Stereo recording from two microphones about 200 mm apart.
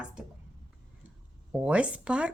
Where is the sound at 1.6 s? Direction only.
5° right (ahead or behind).